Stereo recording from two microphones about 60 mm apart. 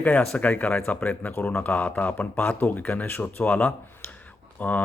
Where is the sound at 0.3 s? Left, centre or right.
Left.